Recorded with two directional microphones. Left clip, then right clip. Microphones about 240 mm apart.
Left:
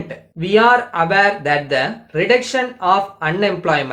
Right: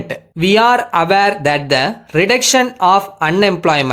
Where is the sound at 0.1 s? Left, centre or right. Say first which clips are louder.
Right 3 dB; right.